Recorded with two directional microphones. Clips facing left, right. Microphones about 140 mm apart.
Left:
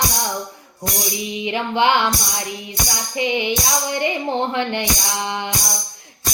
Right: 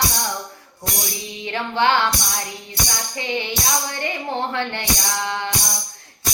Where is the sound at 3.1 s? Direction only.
15° left (ahead or behind).